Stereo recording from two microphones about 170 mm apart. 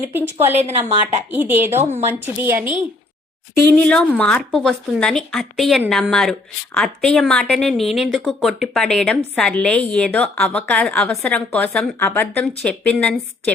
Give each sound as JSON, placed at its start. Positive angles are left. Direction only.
{"t": 0.1, "sound": "speech", "side_deg": -10}
{"t": 1.8, "sound": "a woman's voice", "side_deg": -40}
{"t": 2.4, "sound": "speech", "side_deg": -10}
{"t": 3.7, "sound": "a woman's voice", "side_deg": 10}